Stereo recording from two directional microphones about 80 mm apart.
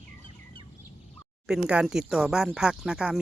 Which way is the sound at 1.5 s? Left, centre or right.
Centre.